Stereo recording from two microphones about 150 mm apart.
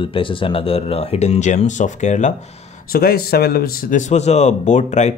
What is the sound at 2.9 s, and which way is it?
Speech, 90° left.